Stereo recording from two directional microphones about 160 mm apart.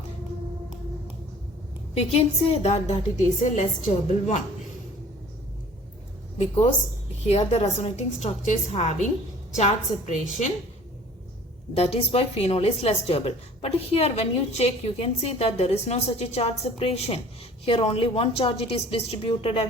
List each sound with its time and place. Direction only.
2.0 s a woman's voice: 40° left (ahead or behind)
7.3 s a woman's voice: 45° left (ahead or behind)
11.7 s a woman's voice: 40° left (ahead or behind)